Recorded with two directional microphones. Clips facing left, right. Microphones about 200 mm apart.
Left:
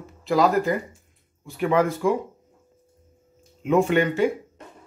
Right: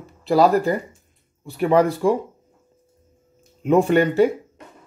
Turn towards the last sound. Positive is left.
turn(degrees=-40)  # may be behind; listen again after turning